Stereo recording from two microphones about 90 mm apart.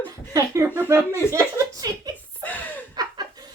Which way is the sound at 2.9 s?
45° right (ahead or behind).